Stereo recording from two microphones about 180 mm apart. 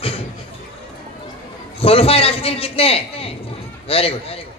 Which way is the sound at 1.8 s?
30° left (ahead or behind).